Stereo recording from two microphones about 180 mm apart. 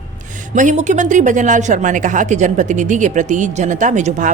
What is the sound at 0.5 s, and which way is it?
Speech, 45° right (ahead or behind).